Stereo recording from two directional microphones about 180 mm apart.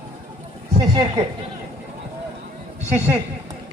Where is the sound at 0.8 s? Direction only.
20° right (ahead or behind).